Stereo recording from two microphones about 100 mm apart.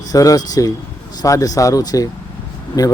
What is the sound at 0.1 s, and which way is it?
Speech, 35° left (ahead or behind).